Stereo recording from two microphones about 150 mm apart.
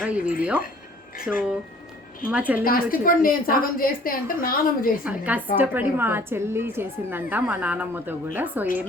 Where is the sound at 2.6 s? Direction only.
75° left (ahead or behind).